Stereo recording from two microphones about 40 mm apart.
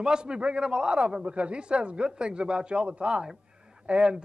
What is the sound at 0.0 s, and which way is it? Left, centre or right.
Speech, right.